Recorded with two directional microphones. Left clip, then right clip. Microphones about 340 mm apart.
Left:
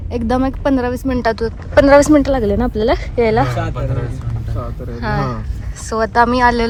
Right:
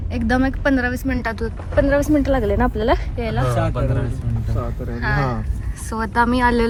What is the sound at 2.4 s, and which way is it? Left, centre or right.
Speech, right.